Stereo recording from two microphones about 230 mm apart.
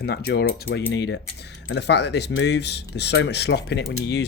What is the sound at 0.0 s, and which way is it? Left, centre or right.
A man's voice, left.